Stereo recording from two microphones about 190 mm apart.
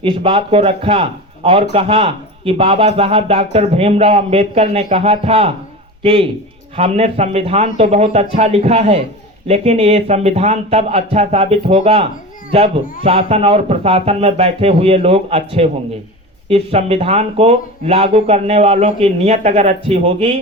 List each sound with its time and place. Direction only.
0.0 s a man's voice: 30° right (ahead or behind)